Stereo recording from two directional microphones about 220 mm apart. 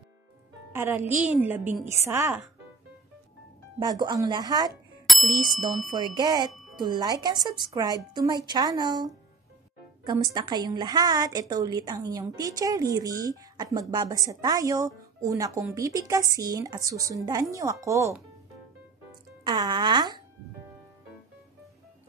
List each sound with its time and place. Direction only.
0.7 s a woman's voice: 10° right (ahead or behind)
3.8 s a woman's voice: 20° right (ahead or behind)
5.0 s bicycle bell: centre (ahead or behind)
5.9 s a woman's voice: 20° right (ahead or behind)
6.5 s music: centre (ahead or behind)
6.8 s a woman's voice: 20° right (ahead or behind)
10.3 s a woman's voice: 20° right (ahead or behind)
19.4 s a woman's voice: 20° right (ahead or behind)